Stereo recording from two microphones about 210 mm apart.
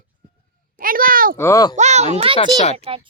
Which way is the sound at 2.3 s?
30° left (ahead or behind).